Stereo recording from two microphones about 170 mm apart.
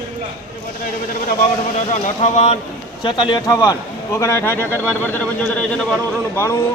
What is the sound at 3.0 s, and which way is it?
A man's voice, 25° left (ahead or behind).